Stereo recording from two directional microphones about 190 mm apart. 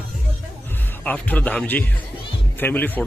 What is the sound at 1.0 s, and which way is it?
Speech, 10° left (ahead or behind).